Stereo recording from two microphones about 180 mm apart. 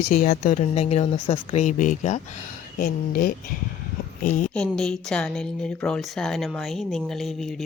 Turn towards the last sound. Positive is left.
turn(degrees=0)  # may be behind; listen again after turning